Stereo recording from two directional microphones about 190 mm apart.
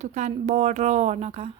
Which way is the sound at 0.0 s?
35° right (ahead or behind).